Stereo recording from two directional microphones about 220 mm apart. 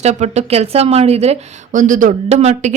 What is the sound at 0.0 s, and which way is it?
Speech, 30° right (ahead or behind).